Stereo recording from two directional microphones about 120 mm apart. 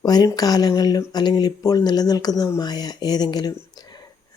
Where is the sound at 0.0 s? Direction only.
35° left (ahead or behind).